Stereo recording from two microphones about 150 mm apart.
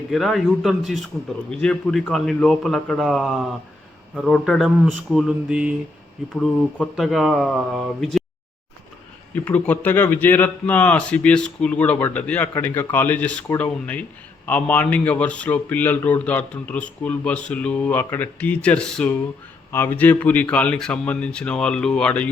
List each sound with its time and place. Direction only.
0.1 s a man's voice: centre (ahead or behind)
9.3 s speech: 10° left (ahead or behind)